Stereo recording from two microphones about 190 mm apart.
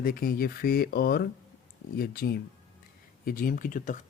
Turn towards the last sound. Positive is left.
turn(degrees=45)  # may be behind; listen again after turning